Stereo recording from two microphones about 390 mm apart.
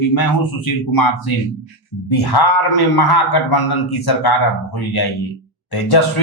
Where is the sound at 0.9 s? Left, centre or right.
Left.